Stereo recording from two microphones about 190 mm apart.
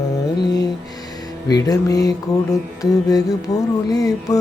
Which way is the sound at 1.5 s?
20° left (ahead or behind).